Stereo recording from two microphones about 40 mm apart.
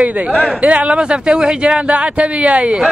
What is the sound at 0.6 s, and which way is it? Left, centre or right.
Speech, right.